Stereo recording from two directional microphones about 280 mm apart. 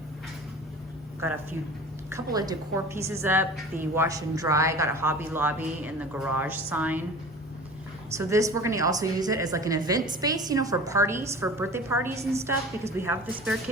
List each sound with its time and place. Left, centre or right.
2.0 s a woman's voice: centre
8.1 s a woman's voice: centre